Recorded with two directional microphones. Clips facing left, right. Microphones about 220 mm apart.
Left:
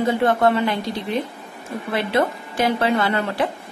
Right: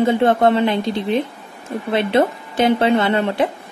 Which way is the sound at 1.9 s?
25° right (ahead or behind).